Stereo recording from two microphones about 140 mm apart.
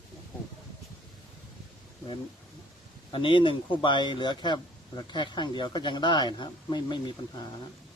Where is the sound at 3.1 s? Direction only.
35° left (ahead or behind).